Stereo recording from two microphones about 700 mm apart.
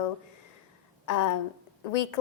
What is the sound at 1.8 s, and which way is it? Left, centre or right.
Speech, left.